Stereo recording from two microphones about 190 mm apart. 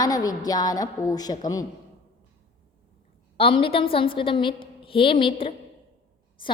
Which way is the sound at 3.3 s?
30° left (ahead or behind).